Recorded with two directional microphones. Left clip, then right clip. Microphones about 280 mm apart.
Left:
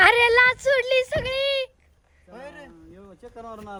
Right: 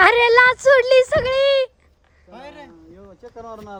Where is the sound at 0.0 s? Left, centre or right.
Centre.